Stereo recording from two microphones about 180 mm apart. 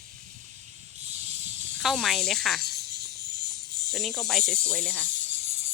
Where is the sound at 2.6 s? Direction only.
60° right (ahead or behind).